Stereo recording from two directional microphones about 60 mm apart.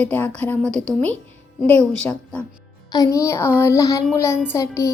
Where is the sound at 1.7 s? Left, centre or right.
Left.